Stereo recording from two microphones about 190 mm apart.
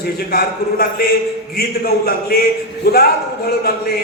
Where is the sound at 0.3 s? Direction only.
55° left (ahead or behind).